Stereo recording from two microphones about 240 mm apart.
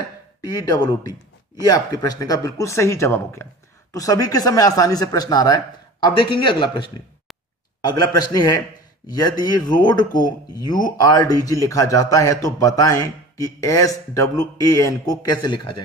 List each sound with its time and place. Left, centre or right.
0.4 s a man's voice: centre